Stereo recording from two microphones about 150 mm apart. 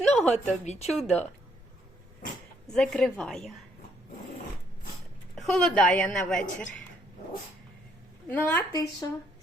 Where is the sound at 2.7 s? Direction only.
5° left (ahead or behind).